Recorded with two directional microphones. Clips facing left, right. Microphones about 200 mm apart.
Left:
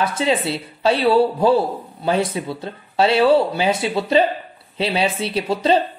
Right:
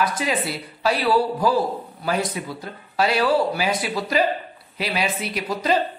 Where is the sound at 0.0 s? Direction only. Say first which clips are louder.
Left 4 dB; 25° left (ahead or behind).